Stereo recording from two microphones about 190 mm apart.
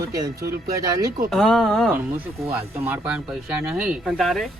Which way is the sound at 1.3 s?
Centre (ahead or behind).